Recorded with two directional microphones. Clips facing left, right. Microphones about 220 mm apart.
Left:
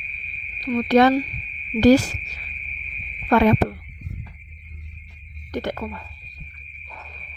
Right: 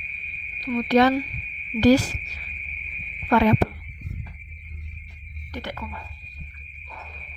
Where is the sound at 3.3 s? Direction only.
50° left (ahead or behind).